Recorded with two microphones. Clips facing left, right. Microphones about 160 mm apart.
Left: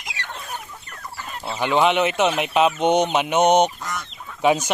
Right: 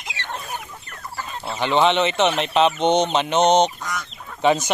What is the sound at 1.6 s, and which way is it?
Speech, 5° left (ahead or behind).